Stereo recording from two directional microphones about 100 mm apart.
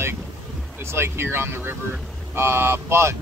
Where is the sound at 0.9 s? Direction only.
25° right (ahead or behind).